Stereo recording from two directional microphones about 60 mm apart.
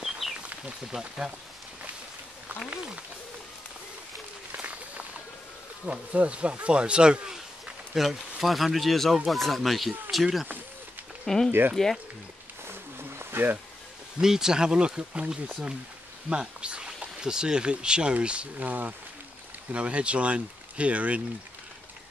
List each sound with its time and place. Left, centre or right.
0.5 s speech: centre
4.6 s applause: right
5.9 s speech: right
7.9 s speech: centre
11.2 s speech: centre
12.6 s a sound: right
14.2 s speech: centre